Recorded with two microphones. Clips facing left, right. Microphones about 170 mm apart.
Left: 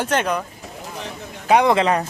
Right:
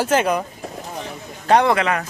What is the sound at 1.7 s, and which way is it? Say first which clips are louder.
Speech: left 2 dB; 30° left (ahead or behind).